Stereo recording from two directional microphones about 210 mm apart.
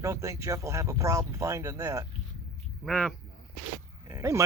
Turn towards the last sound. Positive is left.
turn(degrees=-15)  # may be behind; listen again after turning